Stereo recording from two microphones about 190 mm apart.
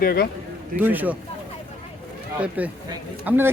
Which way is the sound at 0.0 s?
55° left (ahead or behind).